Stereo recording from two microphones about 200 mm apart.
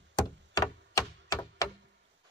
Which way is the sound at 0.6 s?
20° left (ahead or behind).